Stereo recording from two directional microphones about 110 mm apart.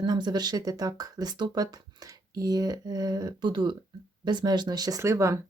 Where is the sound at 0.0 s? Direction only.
40° right (ahead or behind).